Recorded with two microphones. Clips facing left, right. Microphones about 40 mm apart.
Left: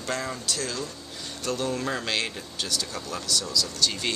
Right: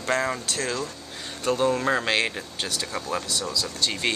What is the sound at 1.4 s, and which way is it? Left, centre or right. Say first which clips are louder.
Speech: right 6 dB; right.